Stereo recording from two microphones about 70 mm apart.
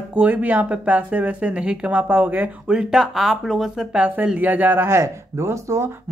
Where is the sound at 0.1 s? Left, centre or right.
Right.